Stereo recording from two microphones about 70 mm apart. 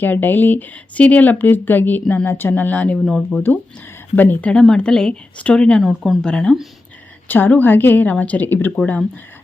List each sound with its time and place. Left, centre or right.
0.0 s speech: left
3.0 s speech: centre
3.3 s a woman's voice: left
5.8 s speech: centre
6.2 s a woman's voice: centre
7.3 s speech: left